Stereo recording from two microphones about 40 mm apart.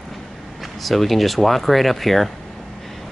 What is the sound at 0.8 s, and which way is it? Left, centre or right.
Speech, centre.